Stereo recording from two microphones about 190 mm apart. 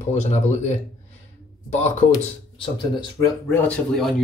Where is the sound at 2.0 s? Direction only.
25° left (ahead or behind).